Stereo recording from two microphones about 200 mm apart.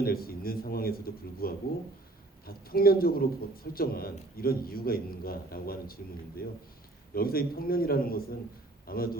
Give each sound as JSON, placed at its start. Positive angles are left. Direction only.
{"t": 0.0, "sound": "a man's voice", "side_deg": 50}